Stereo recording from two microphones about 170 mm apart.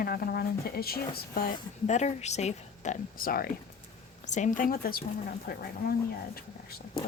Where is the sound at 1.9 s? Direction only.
45° left (ahead or behind); by 3.5 s 60° left (ahead or behind).